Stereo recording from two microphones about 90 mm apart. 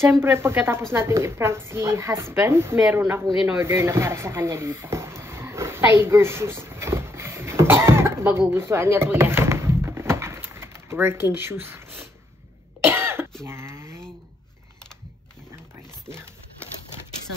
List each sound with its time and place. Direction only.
0.0 s speech: 30° right (ahead or behind)
12.8 s cough: 25° right (ahead or behind)
13.5 s a sound: 30° right (ahead or behind)